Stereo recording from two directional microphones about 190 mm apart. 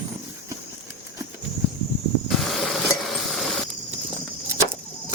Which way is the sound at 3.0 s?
Centre (ahead or behind).